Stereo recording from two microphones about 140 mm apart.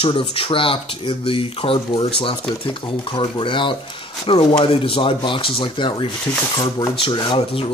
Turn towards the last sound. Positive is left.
turn(degrees=35)  # may be behind; listen again after turning